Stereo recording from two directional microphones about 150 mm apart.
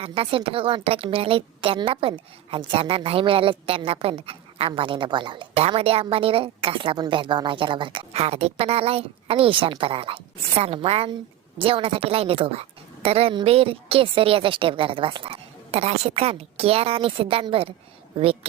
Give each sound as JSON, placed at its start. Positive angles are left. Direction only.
{"t": 0.0, "sound": "a woman's voice", "side_deg": -40}